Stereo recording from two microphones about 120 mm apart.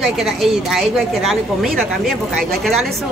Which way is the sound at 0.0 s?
Centre (ahead or behind).